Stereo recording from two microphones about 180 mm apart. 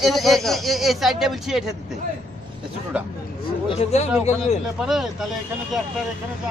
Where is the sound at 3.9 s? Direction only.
35° left (ahead or behind).